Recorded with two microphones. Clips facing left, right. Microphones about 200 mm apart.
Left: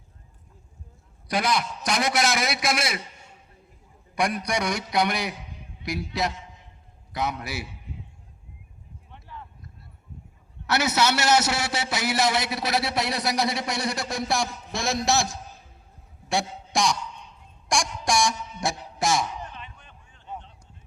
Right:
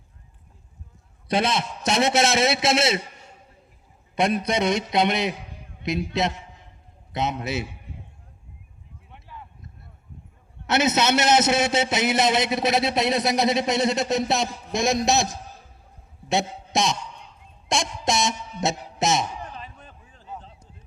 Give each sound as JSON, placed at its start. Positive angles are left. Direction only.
{"t": 1.3, "sound": "a man's voice", "side_deg": -25}
{"t": 4.1, "sound": "a man's voice", "side_deg": -25}
{"t": 7.1, "sound": "a man's voice", "side_deg": -25}
{"t": 10.7, "sound": "a man's voice", "side_deg": -20}
{"t": 19.5, "sound": "a sound", "side_deg": -35}